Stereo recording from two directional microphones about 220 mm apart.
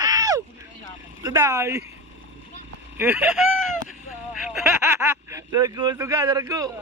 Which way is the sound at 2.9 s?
5° right (ahead or behind).